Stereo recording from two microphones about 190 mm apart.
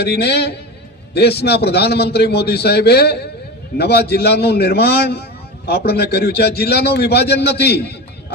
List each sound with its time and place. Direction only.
0.0 s a man's voice: 60° left (ahead or behind)